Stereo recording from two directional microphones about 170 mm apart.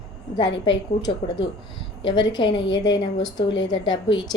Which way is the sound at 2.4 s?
30° left (ahead or behind).